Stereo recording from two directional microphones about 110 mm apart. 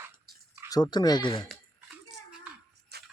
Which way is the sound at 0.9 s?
40° left (ahead or behind).